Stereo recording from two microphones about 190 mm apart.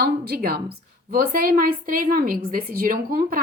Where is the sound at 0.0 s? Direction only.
55° right (ahead or behind).